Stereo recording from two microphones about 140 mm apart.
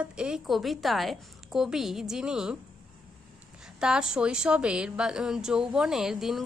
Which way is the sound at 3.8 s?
5° right (ahead or behind).